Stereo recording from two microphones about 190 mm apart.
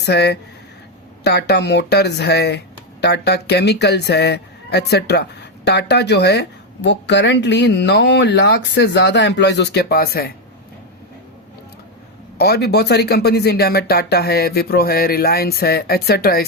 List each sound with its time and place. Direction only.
0.0 s speech: 60° left (ahead or behind)
12.4 s speech: 60° left (ahead or behind)